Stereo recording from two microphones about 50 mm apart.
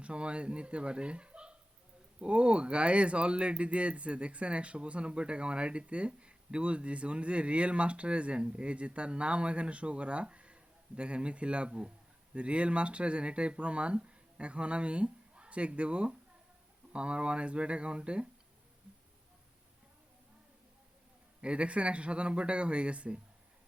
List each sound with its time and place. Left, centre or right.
0.0 s speech: right
21.4 s speech: right